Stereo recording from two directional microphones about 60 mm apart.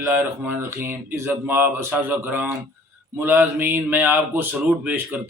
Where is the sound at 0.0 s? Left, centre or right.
Right.